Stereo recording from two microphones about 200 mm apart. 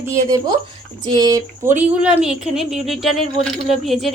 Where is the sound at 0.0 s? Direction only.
15° right (ahead or behind).